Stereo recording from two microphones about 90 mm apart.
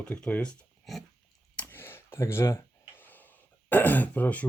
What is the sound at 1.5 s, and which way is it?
Clicking, 25° left (ahead or behind).